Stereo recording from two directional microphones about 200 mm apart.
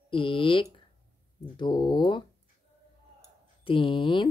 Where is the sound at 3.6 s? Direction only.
25° left (ahead or behind).